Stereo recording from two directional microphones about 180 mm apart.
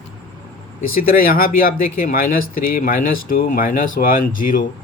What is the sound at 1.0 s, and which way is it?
Speech, 55° left (ahead or behind).